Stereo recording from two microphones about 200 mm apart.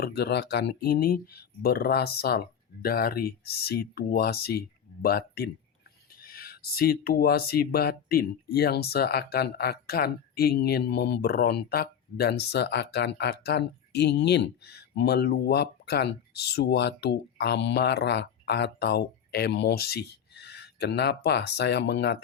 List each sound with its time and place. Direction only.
0.0 s speech: 55° left (ahead or behind)